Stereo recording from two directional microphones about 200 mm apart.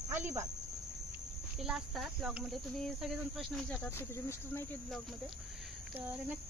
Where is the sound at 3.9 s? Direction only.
10° left (ahead or behind).